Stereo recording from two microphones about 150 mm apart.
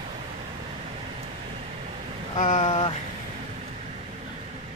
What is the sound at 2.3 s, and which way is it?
Speech, 55° left (ahead or behind).